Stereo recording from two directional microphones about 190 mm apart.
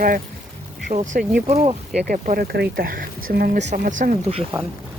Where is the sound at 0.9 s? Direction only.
35° right (ahead or behind).